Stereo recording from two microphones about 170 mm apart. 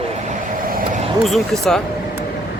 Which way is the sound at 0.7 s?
55° right (ahead or behind).